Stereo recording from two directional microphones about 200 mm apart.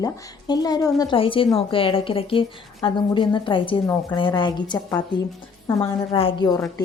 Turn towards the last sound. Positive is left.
turn(degrees=20)  # may be behind; listen again after turning